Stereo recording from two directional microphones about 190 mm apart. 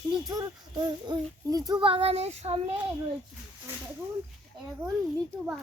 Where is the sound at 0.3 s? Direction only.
20° right (ahead or behind); by 2.7 s 35° right (ahead or behind).